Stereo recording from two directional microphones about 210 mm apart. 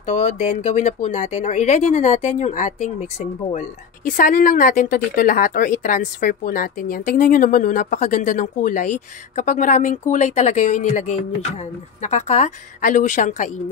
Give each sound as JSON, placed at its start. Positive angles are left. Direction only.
{"t": 0.0, "sound": "speech", "side_deg": 35}